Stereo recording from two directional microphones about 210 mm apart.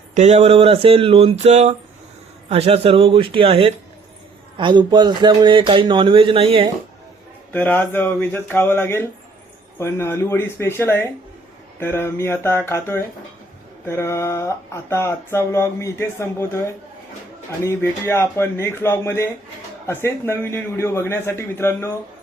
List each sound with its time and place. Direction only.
0.1 s speech: 30° right (ahead or behind)
7.5 s speech: 10° left (ahead or behind)